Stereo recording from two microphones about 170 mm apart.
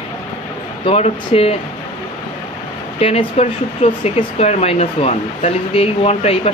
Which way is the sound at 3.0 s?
35° left (ahead or behind).